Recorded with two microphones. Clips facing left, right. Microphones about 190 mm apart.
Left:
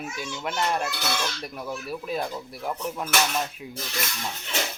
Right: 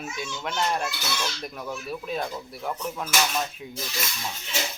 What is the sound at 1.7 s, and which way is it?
Speech, 10° left (ahead or behind).